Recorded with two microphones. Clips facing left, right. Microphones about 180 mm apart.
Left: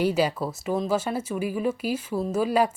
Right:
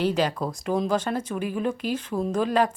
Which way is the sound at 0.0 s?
10° left (ahead or behind).